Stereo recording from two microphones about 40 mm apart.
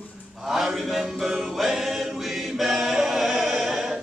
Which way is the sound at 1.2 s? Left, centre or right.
Centre.